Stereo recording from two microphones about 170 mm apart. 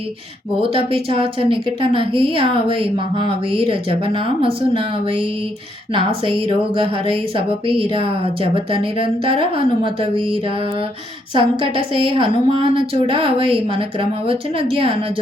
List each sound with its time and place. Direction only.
0.6 s a woman's voice: 30° right (ahead or behind)
6.2 s a woman's voice: 30° right (ahead or behind)
11.3 s a woman's voice: 30° right (ahead or behind)